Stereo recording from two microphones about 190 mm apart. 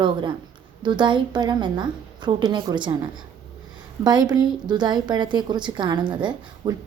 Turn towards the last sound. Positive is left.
turn(degrees=-25)  # may be behind; listen again after turning